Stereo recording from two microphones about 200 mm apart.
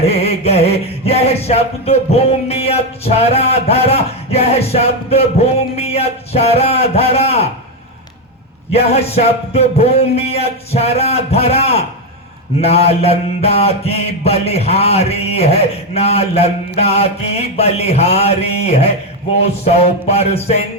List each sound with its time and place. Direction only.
0.0 s male singing: 30° left (ahead or behind)
8.7 s male singing: 30° left (ahead or behind)